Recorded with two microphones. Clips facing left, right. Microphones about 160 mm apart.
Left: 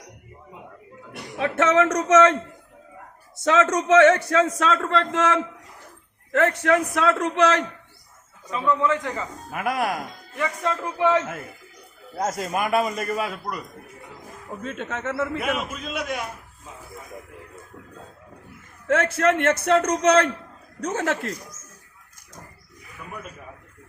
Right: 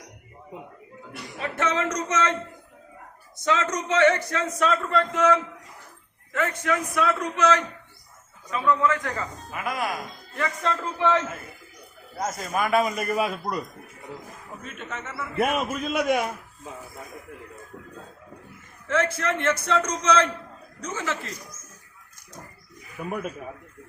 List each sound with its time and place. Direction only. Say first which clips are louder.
1.1 s speech: left 7 dB; 70° left (ahead or behind)
3.4 s a man's voice: left 5 dB; 75° left (ahead or behind)
6.3 s a man's voice: left 6 dB; 70° left (ahead or behind); by 7.5 s 90° left
8.6 s a man's voice: left 1 dB; 20° left (ahead or behind)
9.5 s a man's voice: left 5 dB; 60° left (ahead or behind)
10.3 s speech: left 1 dB; 15° left (ahead or behind)
12.7 s a man's voice: right 1 dB; centre (ahead or behind)
13.1 s a man's voice: right 2 dB; 15° right (ahead or behind)
14.6 s a man's voice: left 7 dB; 90° left
15.4 s a man's voice: right 3 dB; 45° right (ahead or behind)
18.9 s a man's voice: left 5 dB; 65° left (ahead or behind)